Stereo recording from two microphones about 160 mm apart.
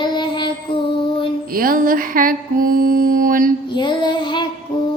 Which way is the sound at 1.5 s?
65° right (ahead or behind).